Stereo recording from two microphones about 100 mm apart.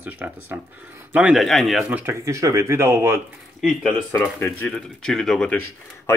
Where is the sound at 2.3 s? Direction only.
30° right (ahead or behind).